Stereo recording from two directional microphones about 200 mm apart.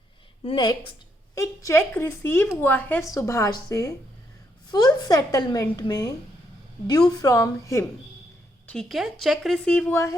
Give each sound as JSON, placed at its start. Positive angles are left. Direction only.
{"t": 0.4, "sound": "a woman's voice", "side_deg": 20}
{"t": 8.6, "sound": "a woman's voice", "side_deg": 5}